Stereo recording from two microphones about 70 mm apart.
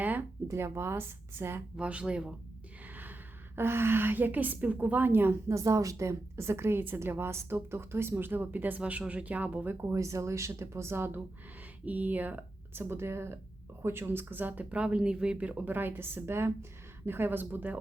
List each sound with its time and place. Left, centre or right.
0.0 s a sound: right
0.5 s a woman's voice: right
1.7 s speech: centre
2.9 s a woman's voice: right
5.5 s a woman's voice: right
9.8 s speech: right
11.9 s a woman's voice: right